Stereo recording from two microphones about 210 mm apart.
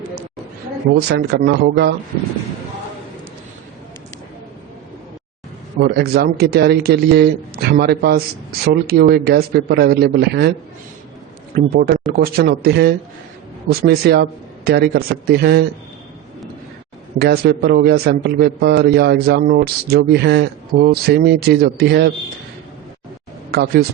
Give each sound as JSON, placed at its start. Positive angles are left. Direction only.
{"t": 0.9, "sound": "a man's voice", "side_deg": -50}
{"t": 5.8, "sound": "a man's voice", "side_deg": -50}
{"t": 11.5, "sound": "a man's voice", "side_deg": -45}
{"t": 17.2, "sound": "a man's voice", "side_deg": -50}
{"t": 23.5, "sound": "speech", "side_deg": -50}